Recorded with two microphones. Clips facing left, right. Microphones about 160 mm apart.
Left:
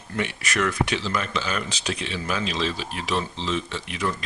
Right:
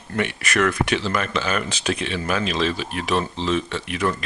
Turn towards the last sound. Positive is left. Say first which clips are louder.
# right 4 dB
turn(degrees=-60)  # may be behind; listen again after turning